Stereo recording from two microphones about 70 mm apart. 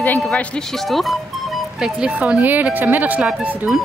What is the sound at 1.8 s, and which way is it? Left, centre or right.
A woman's voice, centre.